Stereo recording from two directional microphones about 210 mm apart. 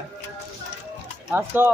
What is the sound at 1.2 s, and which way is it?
Speech, 10° right (ahead or behind).